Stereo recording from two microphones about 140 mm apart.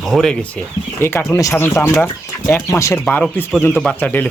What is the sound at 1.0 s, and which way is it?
Speech, 15° left (ahead or behind).